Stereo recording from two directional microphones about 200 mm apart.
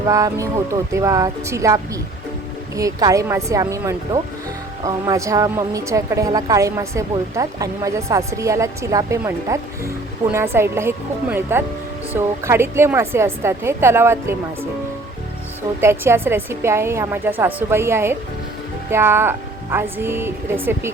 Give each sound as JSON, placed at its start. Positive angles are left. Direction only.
{"t": 0.1, "sound": "a woman's voice", "side_deg": -15}
{"t": 15.8, "sound": "a woman's voice", "side_deg": -10}